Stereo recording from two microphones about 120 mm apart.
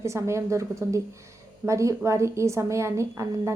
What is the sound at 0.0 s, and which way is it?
A woman's voice, 25° right (ahead or behind).